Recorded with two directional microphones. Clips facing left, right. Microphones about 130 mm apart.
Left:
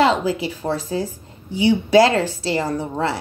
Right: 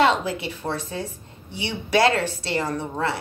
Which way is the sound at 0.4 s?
25° left (ahead or behind).